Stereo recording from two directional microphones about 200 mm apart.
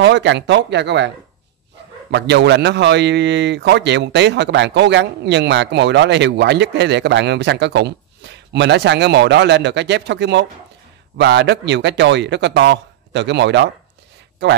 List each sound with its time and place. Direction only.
0.0 s a man's voice: 60° right (ahead or behind)